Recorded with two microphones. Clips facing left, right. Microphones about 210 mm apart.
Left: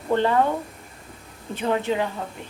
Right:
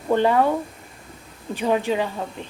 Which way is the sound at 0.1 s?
15° right (ahead or behind).